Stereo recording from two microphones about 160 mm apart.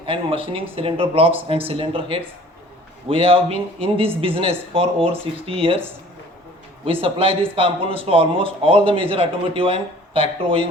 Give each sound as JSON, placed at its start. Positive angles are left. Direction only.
{"t": 0.0, "sound": "a man's voice", "side_deg": -35}
{"t": 6.8, "sound": "a man's voice", "side_deg": -35}